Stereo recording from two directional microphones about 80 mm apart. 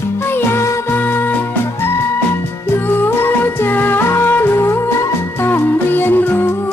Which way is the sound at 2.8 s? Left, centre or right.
Left.